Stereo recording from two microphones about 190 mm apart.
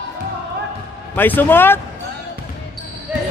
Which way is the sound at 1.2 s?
10° left (ahead or behind).